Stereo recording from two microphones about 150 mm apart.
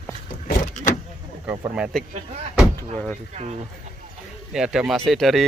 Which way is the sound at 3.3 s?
50° right (ahead or behind).